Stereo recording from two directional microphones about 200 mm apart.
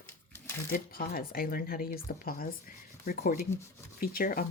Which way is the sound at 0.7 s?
45° left (ahead or behind).